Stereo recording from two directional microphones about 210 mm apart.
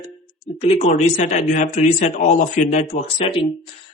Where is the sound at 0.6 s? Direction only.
30° left (ahead or behind).